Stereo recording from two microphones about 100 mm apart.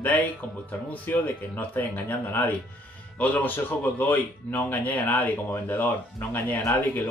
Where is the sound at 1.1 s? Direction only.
20° left (ahead or behind).